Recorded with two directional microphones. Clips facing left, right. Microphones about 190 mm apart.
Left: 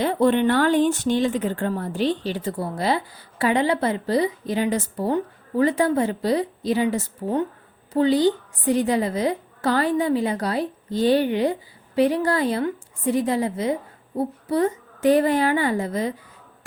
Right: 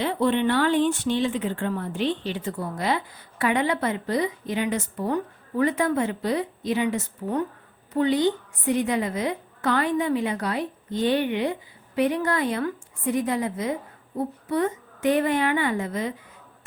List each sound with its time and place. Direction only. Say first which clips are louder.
0.0 s a woman's voice: left 4 dB; 45° left (ahead or behind)